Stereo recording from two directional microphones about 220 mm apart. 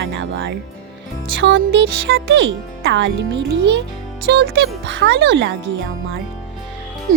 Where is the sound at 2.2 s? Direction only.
55° right (ahead or behind).